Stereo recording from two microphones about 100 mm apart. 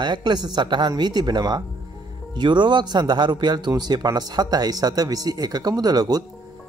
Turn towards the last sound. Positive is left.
turn(degrees=-40)  # may be behind; listen again after turning